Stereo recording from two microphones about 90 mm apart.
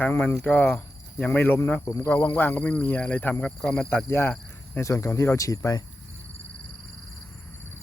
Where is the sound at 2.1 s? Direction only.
20° left (ahead or behind).